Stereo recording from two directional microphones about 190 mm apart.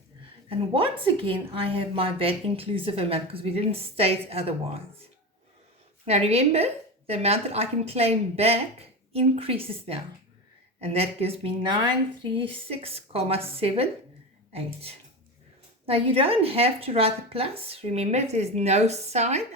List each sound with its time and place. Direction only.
0.4 s a woman's voice: 30° right (ahead or behind)
6.1 s speech: 35° right (ahead or behind)
15.9 s speech: 30° right (ahead or behind)